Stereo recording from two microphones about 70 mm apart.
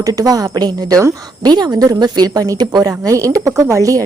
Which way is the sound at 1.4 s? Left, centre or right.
Right.